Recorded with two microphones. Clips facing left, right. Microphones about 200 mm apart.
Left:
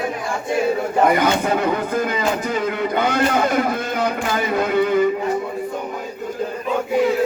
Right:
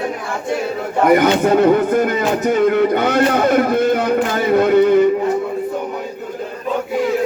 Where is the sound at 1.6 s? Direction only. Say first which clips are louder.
Right 7 dB; 50° right (ahead or behind).